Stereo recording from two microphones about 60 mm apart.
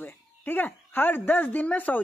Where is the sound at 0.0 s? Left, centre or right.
Left.